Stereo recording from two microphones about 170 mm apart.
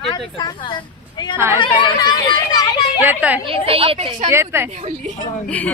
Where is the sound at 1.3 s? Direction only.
10° right (ahead or behind).